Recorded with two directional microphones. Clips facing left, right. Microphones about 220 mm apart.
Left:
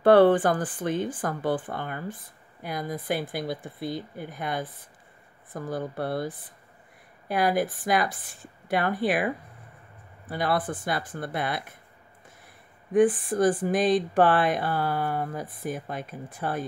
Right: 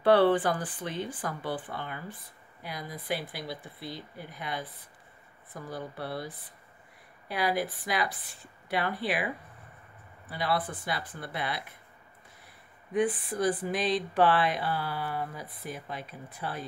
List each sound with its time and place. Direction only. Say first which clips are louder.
0.0 s speech: left 5 dB; 50° left (ahead or behind)
10.3 s speech: left 4 dB; 50° left (ahead or behind)
12.9 s speech: left 7 dB; 50° left (ahead or behind)